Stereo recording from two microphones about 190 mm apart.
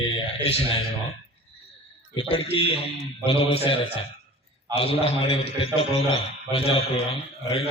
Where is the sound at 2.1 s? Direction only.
30° left (ahead or behind).